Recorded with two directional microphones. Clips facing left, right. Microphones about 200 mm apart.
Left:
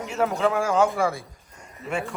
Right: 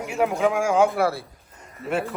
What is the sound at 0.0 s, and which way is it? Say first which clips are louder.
A man's voice: right 1 dB; 10° right (ahead or behind).